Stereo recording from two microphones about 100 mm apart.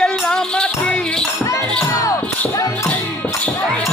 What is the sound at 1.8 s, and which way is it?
Music, 35° left (ahead or behind).